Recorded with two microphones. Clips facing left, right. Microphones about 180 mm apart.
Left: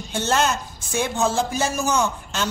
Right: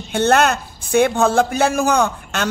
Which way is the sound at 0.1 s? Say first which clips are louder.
Right 6 dB; 60° right (ahead or behind).